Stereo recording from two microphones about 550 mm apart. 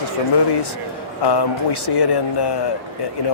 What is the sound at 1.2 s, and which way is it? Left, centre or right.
Speech, left.